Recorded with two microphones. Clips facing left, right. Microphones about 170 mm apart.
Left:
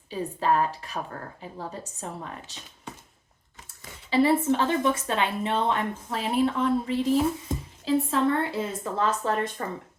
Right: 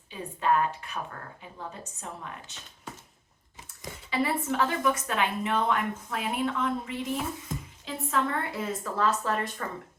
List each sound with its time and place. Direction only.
0.1 s a woman's voice: 35° left (ahead or behind)
4.1 s a woman's voice: 30° left (ahead or behind)